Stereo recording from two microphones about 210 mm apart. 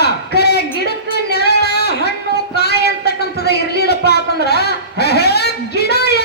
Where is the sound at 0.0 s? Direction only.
50° left (ahead or behind).